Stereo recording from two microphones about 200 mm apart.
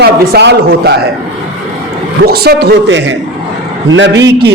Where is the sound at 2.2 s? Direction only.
50° right (ahead or behind).